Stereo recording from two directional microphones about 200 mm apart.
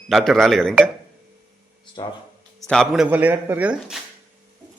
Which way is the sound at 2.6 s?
5° left (ahead or behind).